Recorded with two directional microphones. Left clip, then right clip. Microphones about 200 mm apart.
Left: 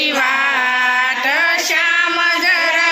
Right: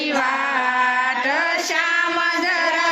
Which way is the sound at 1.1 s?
20° right (ahead or behind).